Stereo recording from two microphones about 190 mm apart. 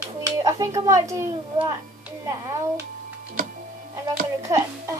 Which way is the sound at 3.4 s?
45° right (ahead or behind).